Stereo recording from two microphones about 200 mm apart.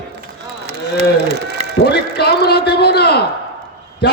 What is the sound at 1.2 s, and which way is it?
Speech, 55° right (ahead or behind).